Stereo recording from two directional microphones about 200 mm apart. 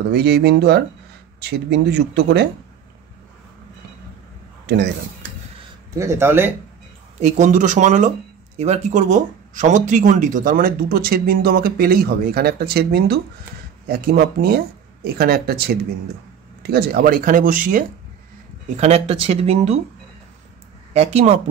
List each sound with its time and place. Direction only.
0.1 s speech: 55° right (ahead or behind)
4.6 s speech: 55° right (ahead or behind)
5.9 s speech: 15° right (ahead or behind)
7.2 s speech: 35° right (ahead or behind)
18.8 s speech: 35° right (ahead or behind)
20.9 s speech: 30° right (ahead or behind)